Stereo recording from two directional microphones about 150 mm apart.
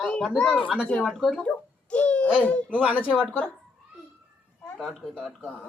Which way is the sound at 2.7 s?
10° right (ahead or behind).